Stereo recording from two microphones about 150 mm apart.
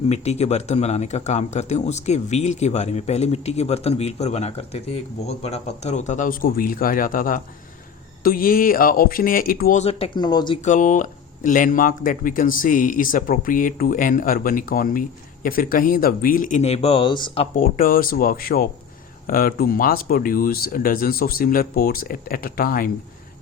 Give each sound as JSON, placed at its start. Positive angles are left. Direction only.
{"t": 0.1, "sound": "speech", "side_deg": 45}
{"t": 10.2, "sound": "speech", "side_deg": 30}
{"t": 10.6, "sound": "speech", "side_deg": 60}
{"t": 16.6, "sound": "speech", "side_deg": 45}
{"t": 17.5, "sound": "speech", "side_deg": 70}